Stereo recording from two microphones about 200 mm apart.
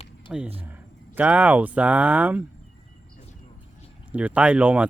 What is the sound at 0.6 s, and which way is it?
Speech, 10° right (ahead or behind).